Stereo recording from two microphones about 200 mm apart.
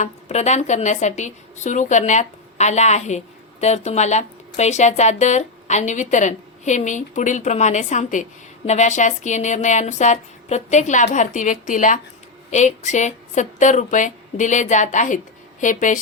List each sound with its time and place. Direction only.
0.0 s speech: 35° left (ahead or behind)